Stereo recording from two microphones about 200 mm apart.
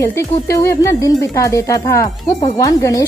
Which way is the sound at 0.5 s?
15° left (ahead or behind).